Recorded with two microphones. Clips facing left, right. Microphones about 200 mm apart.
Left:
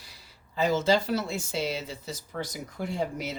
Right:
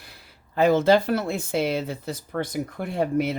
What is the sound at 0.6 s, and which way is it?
Speech, 55° right (ahead or behind).